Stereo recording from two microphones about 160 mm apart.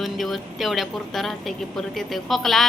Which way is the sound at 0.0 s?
Centre (ahead or behind).